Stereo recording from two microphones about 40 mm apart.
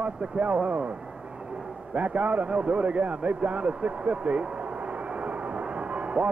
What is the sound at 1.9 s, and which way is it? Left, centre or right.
A man's voice, right.